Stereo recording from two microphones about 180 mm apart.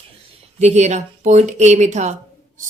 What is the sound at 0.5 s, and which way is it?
A woman's voice, 40° right (ahead or behind).